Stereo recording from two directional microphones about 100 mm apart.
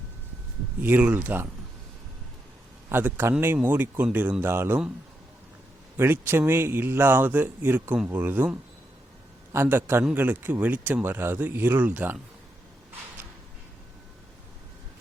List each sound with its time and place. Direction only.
0.8 s speech: 15° right (ahead or behind)
2.9 s speech: 20° right (ahead or behind)
6.0 s speech: 20° right (ahead or behind)